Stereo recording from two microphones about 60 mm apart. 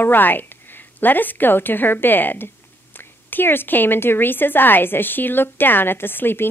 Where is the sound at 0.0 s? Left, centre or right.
Left.